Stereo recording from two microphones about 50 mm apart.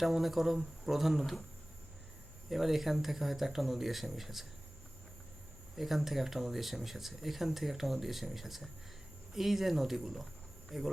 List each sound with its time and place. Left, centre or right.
0.0 s speech: centre
2.5 s speech: centre
5.7 s speech: centre
10.7 s insect: centre